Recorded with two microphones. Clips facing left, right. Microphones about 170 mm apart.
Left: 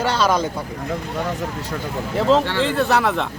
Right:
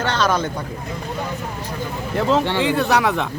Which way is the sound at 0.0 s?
10° left (ahead or behind).